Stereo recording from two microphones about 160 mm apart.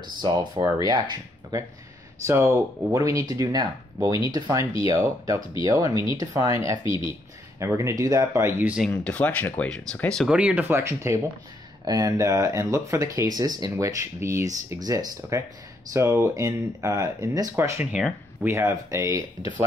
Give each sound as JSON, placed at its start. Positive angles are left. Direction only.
{"t": 0.8, "sound": "speech", "side_deg": -25}
{"t": 6.8, "sound": "speech", "side_deg": 30}
{"t": 7.5, "sound": "speech", "side_deg": -20}
{"t": 9.0, "sound": "speech", "side_deg": 10}
{"t": 10.3, "sound": "speech", "side_deg": -10}